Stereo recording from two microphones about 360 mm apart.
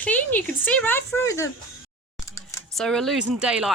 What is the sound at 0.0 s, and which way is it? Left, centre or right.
Speech, centre.